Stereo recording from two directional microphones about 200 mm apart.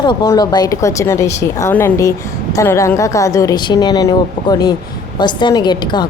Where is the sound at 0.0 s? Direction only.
20° left (ahead or behind).